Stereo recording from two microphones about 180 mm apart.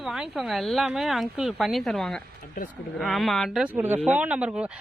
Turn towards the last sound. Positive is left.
turn(degrees=-5)  # may be behind; listen again after turning